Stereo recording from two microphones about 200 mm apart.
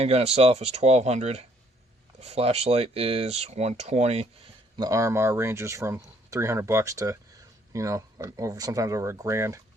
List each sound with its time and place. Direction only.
0.0 s speech: 30° right (ahead or behind)
4.8 s speech: 15° right (ahead or behind)